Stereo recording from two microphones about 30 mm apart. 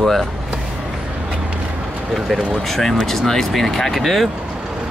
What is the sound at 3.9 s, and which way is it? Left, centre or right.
Speech, centre.